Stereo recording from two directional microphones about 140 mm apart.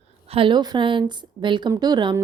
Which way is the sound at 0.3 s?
40° right (ahead or behind).